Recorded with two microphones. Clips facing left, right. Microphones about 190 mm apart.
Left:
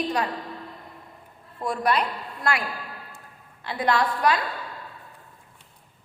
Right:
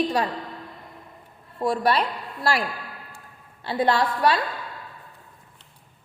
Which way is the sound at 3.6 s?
30° right (ahead or behind).